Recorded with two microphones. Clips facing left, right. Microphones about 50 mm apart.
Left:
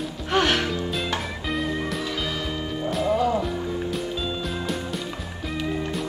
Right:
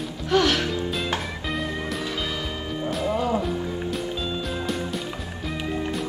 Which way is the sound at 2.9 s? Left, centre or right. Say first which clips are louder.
Left 2 dB; centre.